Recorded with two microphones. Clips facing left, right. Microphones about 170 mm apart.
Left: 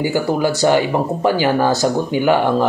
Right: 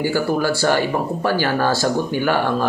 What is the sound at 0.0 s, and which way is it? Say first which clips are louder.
Speech: left 2 dB; 20° left (ahead or behind).